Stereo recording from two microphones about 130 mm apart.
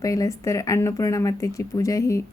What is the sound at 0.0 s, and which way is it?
A woman's voice, 25° left (ahead or behind).